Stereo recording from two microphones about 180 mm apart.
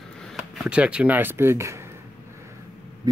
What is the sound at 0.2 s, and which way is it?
Speech, centre (ahead or behind).